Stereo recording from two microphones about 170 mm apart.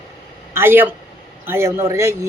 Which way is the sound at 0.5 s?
15° right (ahead or behind).